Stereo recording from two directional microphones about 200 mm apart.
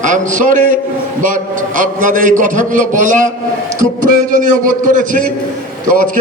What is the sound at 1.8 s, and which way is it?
A man's voice, 40° right (ahead or behind).